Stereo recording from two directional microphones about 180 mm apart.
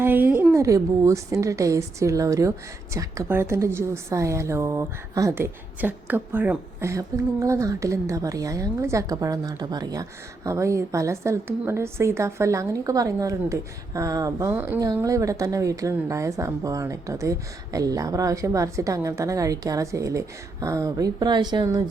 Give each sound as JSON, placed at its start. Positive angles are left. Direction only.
{"t": 0.0, "sound": "a woman's voice", "side_deg": -10}